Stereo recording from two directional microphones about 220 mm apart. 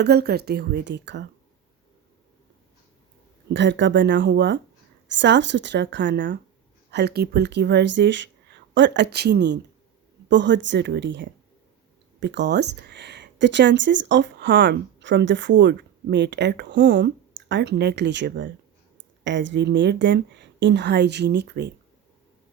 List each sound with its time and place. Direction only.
0.0 s speech: 45° right (ahead or behind)
3.5 s a woman's voice: 55° right (ahead or behind)